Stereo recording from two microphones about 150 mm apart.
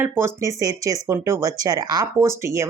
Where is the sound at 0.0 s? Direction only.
20° right (ahead or behind).